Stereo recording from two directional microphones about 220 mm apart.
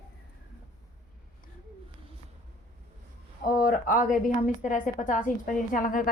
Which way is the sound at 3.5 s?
40° left (ahead or behind).